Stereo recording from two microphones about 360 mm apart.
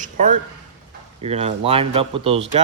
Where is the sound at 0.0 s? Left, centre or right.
Right.